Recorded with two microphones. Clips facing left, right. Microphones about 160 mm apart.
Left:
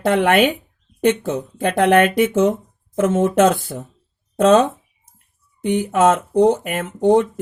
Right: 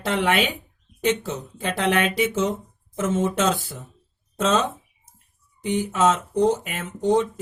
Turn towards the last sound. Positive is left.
turn(degrees=55)  # may be behind; listen again after turning